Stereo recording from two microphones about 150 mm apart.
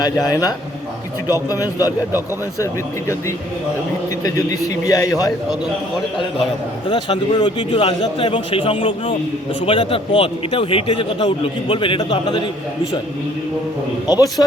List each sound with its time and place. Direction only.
0.0 s a man's voice: 25° left (ahead or behind)
4.2 s a man's voice: 20° left (ahead or behind)
6.9 s a man's voice: 30° left (ahead or behind)
14.1 s a man's voice: 25° left (ahead or behind)